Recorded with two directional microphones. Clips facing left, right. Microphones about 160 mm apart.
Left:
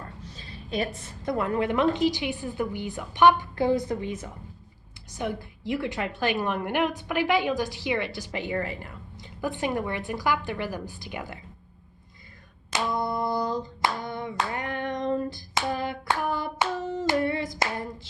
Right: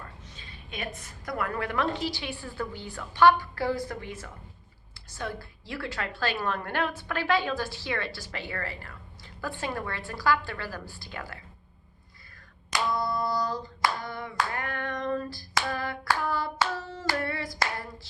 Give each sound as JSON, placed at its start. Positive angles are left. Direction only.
{"t": 0.0, "sound": "a woman's voice", "side_deg": 35}
{"t": 12.7, "sound": "hands", "side_deg": 20}